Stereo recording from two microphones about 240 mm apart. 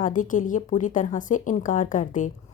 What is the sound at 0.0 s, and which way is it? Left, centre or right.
A woman's voice, left.